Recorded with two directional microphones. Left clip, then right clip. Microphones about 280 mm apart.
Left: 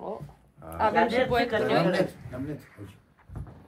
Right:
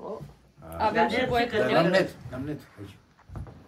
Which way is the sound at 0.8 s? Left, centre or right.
Centre.